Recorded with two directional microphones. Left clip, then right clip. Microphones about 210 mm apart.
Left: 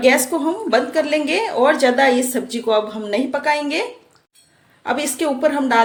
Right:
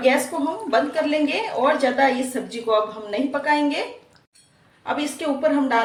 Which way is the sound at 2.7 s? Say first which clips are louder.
Left 3 dB; 55° left (ahead or behind).